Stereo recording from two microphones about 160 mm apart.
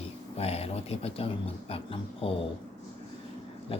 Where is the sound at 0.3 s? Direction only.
40° left (ahead or behind).